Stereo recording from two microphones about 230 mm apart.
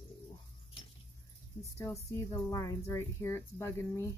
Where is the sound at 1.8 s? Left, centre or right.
Centre.